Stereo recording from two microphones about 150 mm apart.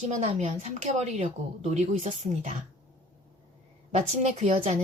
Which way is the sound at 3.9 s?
50° right (ahead or behind).